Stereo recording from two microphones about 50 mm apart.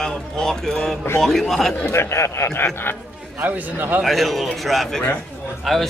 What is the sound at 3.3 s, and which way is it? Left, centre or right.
Speech, right.